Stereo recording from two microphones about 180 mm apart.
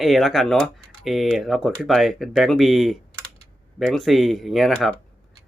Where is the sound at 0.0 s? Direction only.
Centre (ahead or behind).